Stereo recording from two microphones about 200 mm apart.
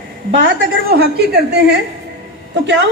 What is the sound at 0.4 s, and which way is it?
A woman's voice, 50° right (ahead or behind).